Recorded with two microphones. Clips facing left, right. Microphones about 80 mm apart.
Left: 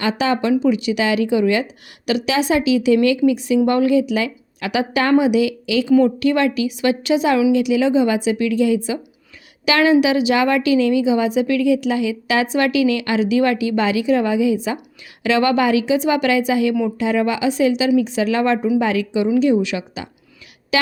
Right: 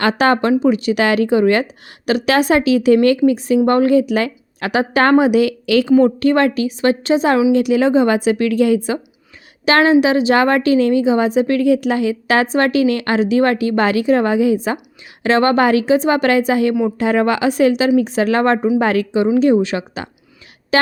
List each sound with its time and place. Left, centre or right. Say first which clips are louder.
0.0 s a woman's voice: right 4 dB; right
6.1 s a woman's voice: right 3 dB; right
9.6 s a woman's voice: right 2 dB; right
20.7 s a sound: right 4 dB; right